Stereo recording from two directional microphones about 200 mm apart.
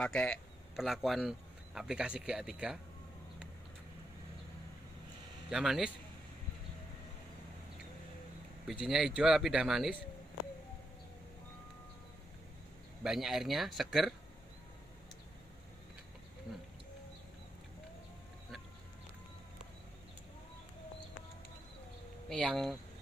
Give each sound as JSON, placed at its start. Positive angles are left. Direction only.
{"t": 0.0, "sound": "speech", "side_deg": 5}
{"t": 5.5, "sound": "speech", "side_deg": 0}
{"t": 8.8, "sound": "speech", "side_deg": 0}
{"t": 13.0, "sound": "speech", "side_deg": 0}
{"t": 22.3, "sound": "speech", "side_deg": 0}